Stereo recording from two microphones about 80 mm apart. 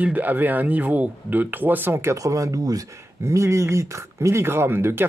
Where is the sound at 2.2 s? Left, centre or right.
Right.